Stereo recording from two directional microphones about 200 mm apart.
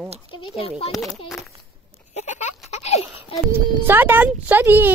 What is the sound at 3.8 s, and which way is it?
Speech, 10° right (ahead or behind).